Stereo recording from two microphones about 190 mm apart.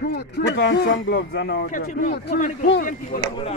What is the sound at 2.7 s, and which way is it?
Speech, 50° left (ahead or behind).